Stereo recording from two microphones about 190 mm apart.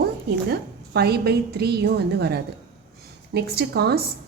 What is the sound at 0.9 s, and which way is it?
A woman's voice, 55° right (ahead or behind).